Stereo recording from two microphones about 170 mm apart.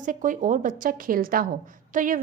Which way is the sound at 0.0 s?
50° right (ahead or behind).